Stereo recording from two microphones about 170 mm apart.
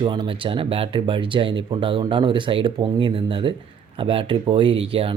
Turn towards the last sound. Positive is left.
turn(degrees=-35)  # may be behind; listen again after turning